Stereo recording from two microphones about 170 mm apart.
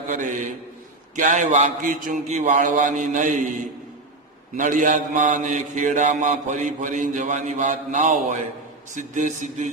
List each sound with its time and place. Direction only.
0.1 s mantra: 50° right (ahead or behind)
4.5 s mantra: 50° right (ahead or behind)